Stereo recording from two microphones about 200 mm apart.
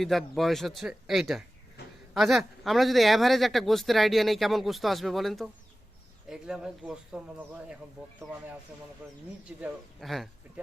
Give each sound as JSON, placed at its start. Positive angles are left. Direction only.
{"t": 0.0, "sound": "a man's voice", "side_deg": 0}
{"t": 9.0, "sound": "a man's voice", "side_deg": -10}